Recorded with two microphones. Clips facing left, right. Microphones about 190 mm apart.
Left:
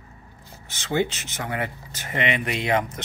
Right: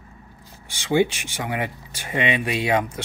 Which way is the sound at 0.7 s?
15° right (ahead or behind).